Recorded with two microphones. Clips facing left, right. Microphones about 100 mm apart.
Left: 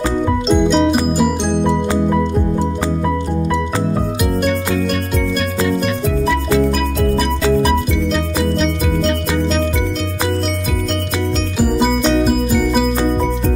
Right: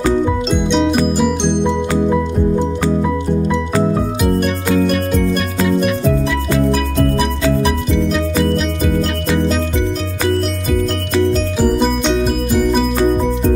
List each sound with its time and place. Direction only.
0.5 s music: centre (ahead or behind)
8.5 s music: 5° right (ahead or behind)
11.5 s music: 5° left (ahead or behind)